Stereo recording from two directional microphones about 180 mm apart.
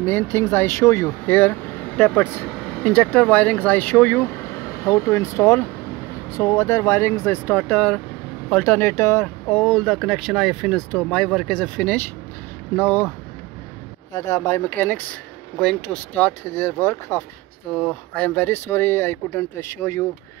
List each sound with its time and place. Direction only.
0.0 s speech: 15° left (ahead or behind)
14.1 s speech: 20° left (ahead or behind)